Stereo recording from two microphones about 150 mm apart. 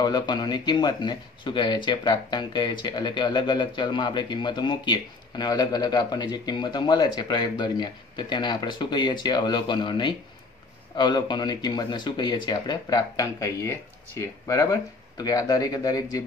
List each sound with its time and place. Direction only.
0.0 s speech: 30° left (ahead or behind)